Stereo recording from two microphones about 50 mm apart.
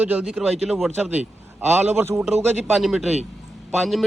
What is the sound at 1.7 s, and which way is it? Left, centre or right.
Speech, right.